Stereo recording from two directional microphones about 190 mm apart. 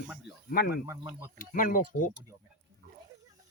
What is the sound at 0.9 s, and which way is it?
Speech, 15° right (ahead or behind).